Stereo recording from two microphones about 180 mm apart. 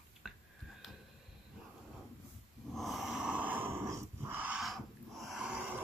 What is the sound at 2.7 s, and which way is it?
Dog, centre (ahead or behind).